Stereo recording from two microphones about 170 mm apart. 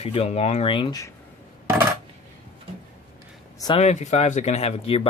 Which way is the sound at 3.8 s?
40° left (ahead or behind).